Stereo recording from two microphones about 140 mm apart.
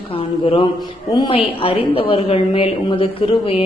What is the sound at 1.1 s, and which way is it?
A woman's voice, 30° left (ahead or behind).